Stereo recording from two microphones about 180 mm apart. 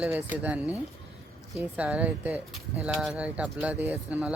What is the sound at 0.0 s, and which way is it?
Speech, 10° right (ahead or behind).